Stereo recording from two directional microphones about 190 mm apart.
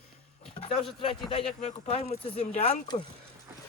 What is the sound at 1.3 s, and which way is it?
A man's voice, 30° left (ahead or behind).